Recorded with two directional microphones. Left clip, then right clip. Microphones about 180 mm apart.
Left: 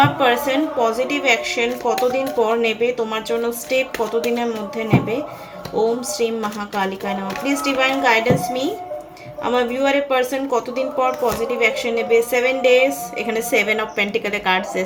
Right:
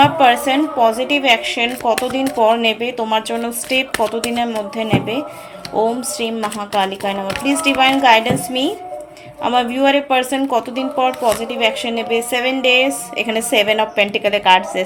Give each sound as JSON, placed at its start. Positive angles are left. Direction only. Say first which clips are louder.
{"t": 0.0, "sound": "speech", "louder": "right 4 dB", "side_deg": -50}